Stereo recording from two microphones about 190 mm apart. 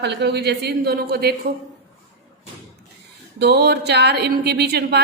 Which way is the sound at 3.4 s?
60° right (ahead or behind).